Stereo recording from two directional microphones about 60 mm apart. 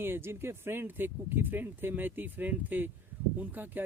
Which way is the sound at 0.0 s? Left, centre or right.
Right.